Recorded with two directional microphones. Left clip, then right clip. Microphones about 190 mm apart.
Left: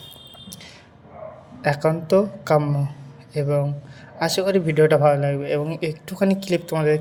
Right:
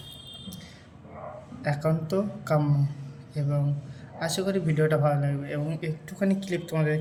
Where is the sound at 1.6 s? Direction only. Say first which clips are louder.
Left 8 dB; 45° left (ahead or behind).